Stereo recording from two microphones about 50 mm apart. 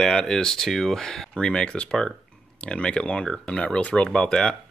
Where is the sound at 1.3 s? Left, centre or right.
Centre.